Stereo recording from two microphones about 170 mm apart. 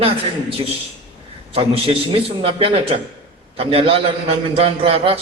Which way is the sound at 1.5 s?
35° right (ahead or behind).